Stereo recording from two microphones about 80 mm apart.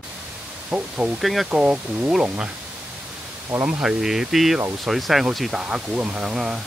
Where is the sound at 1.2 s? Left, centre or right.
Centre.